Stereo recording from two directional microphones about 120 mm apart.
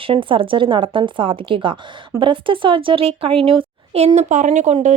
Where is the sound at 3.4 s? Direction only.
55° right (ahead or behind).